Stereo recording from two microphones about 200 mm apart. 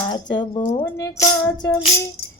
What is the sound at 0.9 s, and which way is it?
Music, 15° left (ahead or behind).